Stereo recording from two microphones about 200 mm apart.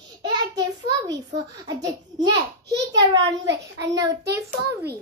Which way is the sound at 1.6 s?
20° right (ahead or behind).